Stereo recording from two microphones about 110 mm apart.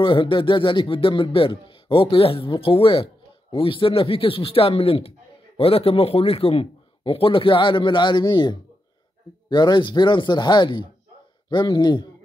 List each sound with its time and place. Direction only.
0.0 s a man's voice: 50° left (ahead or behind)